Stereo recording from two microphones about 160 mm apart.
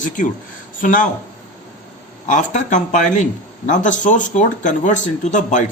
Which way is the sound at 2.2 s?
50° left (ahead or behind).